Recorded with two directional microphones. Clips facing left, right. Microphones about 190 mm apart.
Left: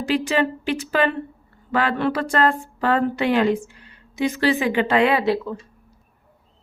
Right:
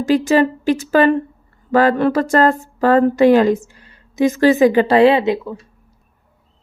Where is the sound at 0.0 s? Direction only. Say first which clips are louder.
Right 7 dB; 40° right (ahead or behind); by 5.4 s 25° right (ahead or behind).